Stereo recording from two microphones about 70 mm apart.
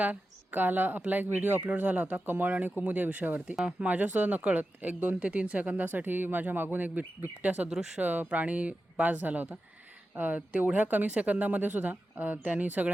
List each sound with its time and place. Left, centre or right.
0.0 s speech: right
7.7 s speech: centre
8.0 s speech: right